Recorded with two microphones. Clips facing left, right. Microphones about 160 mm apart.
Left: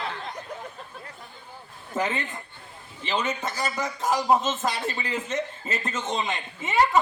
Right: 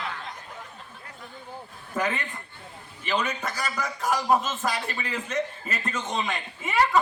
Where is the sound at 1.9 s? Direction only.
25° left (ahead or behind).